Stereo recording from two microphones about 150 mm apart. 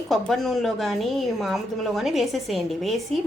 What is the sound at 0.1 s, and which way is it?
A woman's voice, centre (ahead or behind).